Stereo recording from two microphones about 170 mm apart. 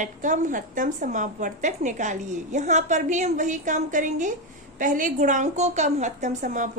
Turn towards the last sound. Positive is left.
turn(degrees=-45)  # may be behind; listen again after turning